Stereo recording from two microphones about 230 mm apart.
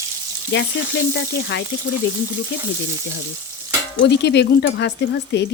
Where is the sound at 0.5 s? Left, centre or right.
Left.